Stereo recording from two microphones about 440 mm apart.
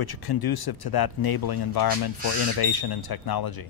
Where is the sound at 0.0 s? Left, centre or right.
Left.